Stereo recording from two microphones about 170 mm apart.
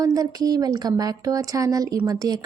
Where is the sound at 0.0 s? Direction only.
20° right (ahead or behind).